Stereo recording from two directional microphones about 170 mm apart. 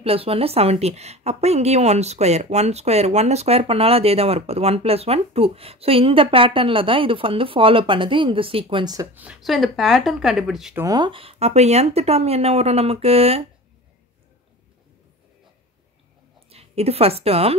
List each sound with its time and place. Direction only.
0.0 s a woman's voice: 35° right (ahead or behind)
9.1 s speech: 5° right (ahead or behind)
10.8 s a woman's voice: 25° right (ahead or behind)
16.4 s a woman's voice: 35° right (ahead or behind)